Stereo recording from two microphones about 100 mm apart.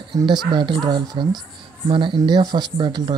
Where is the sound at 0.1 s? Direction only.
40° right (ahead or behind).